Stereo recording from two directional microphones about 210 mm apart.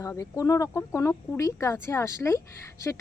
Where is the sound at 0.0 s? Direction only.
15° left (ahead or behind).